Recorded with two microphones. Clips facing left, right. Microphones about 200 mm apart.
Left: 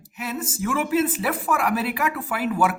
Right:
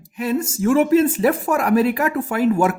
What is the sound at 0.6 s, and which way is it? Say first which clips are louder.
Speech: right 9 dB; 30° right (ahead or behind).